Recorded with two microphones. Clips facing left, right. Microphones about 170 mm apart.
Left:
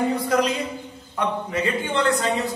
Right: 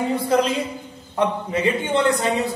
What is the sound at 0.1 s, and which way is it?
A man's voice, 25° right (ahead or behind).